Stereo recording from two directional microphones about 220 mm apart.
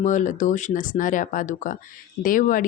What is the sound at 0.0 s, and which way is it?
A woman's voice, 35° left (ahead or behind).